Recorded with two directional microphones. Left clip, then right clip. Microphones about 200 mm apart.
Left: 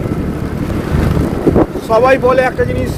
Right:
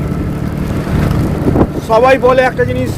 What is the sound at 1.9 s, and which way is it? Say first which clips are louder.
Speech: right 2 dB; 10° right (ahead or behind).